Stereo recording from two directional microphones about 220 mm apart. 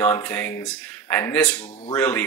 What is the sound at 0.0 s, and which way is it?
Speech, 10° left (ahead or behind).